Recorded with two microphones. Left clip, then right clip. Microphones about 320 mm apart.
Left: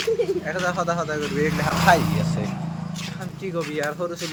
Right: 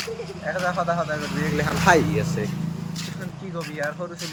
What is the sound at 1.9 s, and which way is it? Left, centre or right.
Speech, centre.